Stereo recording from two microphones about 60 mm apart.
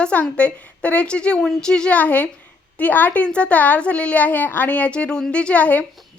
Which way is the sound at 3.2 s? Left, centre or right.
Centre.